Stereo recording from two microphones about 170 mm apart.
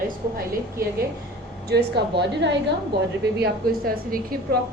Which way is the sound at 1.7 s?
75° right (ahead or behind).